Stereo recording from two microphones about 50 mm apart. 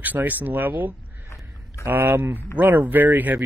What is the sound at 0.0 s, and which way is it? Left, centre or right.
Speech, right.